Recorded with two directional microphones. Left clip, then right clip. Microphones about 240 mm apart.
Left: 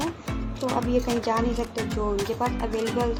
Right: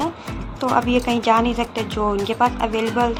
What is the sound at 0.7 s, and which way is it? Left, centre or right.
A woman's voice, centre.